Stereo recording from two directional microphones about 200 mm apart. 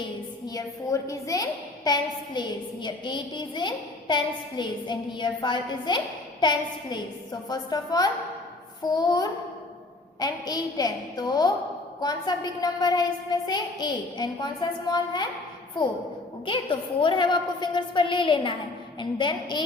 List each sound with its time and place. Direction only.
0.0 s a woman's voice: 20° left (ahead or behind)
16.5 s a woman's voice: 25° left (ahead or behind)